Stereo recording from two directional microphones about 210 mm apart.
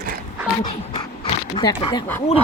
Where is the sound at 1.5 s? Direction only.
20° left (ahead or behind).